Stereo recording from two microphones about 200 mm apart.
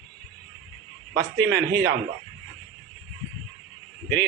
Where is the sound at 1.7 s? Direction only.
55° right (ahead or behind).